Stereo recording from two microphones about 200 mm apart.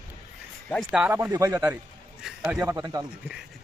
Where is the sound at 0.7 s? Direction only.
Centre (ahead or behind); by 3.1 s 20° right (ahead or behind).